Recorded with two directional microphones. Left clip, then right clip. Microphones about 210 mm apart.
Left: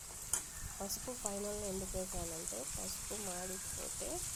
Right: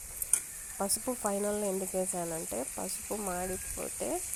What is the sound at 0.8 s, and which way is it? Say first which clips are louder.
Speech: right 10 dB; 40° right (ahead or behind).